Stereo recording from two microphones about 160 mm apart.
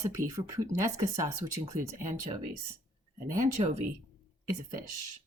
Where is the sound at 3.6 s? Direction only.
35° right (ahead or behind).